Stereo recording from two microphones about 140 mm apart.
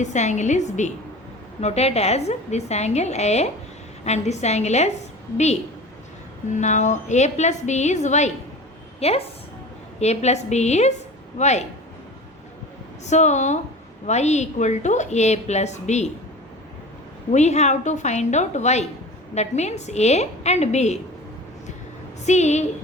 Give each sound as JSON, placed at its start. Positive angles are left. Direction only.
{"t": 0.0, "sound": "a woman's voice", "side_deg": 60}
{"t": 13.1, "sound": "a woman's voice", "side_deg": 55}
{"t": 17.3, "sound": "a woman's voice", "side_deg": 55}
{"t": 22.3, "sound": "a woman's voice", "side_deg": 55}